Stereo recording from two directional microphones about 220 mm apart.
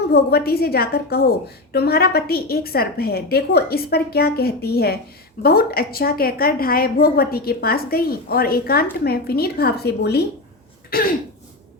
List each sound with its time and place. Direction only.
0.1 s a woman's voice: 45° left (ahead or behind)